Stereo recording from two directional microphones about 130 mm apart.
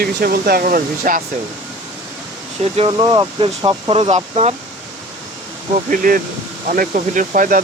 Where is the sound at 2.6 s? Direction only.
55° right (ahead or behind).